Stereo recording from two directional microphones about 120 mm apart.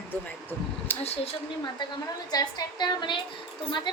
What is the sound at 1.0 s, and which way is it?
Speech, 60° left (ahead or behind).